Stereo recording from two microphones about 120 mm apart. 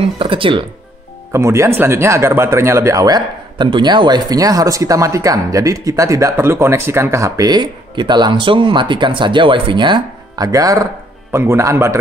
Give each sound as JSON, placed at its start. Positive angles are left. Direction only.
{"t": 0.2, "sound": "speech", "side_deg": -45}
{"t": 1.3, "sound": "speech", "side_deg": -25}